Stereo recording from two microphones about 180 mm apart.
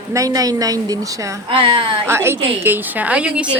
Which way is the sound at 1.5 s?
30° right (ahead or behind).